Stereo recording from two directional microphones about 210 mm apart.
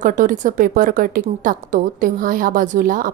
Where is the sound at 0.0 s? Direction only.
35° right (ahead or behind).